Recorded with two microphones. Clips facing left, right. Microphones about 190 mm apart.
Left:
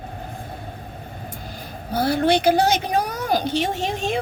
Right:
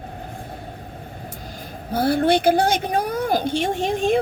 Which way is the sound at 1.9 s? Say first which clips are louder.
Right 1 dB; 50° right (ahead or behind).